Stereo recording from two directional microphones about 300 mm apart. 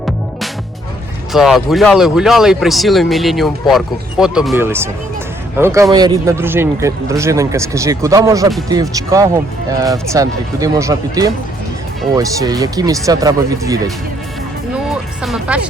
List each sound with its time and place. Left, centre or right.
1.3 s a man's voice: centre
14.8 s music: centre